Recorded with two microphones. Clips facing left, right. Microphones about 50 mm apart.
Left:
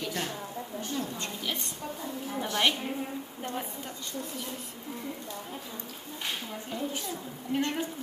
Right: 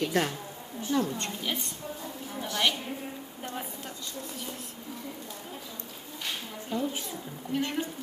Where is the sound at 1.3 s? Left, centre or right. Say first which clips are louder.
Right 1 dB; centre.